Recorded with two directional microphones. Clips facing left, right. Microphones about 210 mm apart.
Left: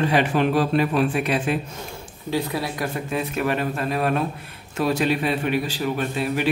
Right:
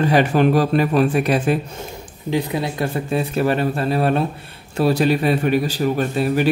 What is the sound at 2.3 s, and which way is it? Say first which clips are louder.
A man's voice: right 3 dB; 20° right (ahead or behind).